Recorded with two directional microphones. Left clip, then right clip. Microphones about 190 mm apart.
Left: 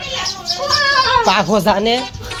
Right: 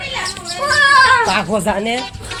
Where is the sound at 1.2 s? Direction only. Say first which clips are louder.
Left 3 dB; 35° left (ahead or behind).